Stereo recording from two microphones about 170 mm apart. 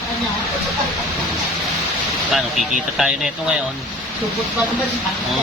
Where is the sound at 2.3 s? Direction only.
Centre (ahead or behind).